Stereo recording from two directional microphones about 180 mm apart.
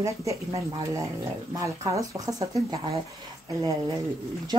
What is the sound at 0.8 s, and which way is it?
Speech, 15° right (ahead or behind).